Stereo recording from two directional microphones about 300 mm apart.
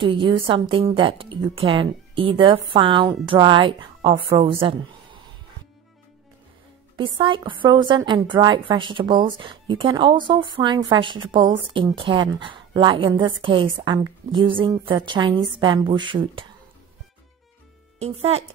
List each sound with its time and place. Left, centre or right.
0.0 s a woman's voice: centre
7.0 s a woman's voice: centre
17.9 s speech: centre